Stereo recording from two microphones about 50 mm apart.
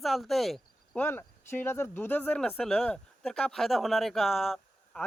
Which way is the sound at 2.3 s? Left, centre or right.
Centre.